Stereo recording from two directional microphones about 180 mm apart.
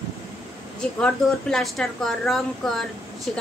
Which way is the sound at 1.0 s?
Centre (ahead or behind).